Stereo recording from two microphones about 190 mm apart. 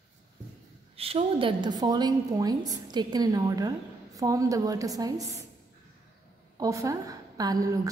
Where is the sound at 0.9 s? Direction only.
30° right (ahead or behind).